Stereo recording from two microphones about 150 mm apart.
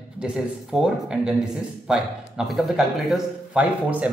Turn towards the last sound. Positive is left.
turn(degrees=-10)  # may be behind; listen again after turning